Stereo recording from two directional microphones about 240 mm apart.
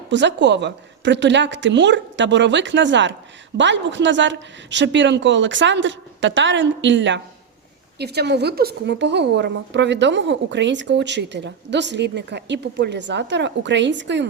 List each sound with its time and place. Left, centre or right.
0.1 s a woman's voice: right